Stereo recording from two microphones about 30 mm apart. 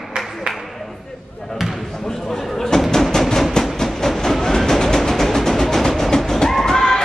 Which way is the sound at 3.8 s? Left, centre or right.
Centre.